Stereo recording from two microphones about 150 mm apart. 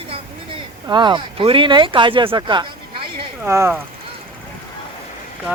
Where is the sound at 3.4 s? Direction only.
15° right (ahead or behind).